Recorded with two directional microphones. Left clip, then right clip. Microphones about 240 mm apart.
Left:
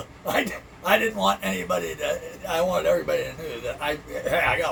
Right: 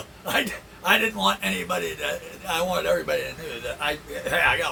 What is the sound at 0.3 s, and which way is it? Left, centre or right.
Speech, centre.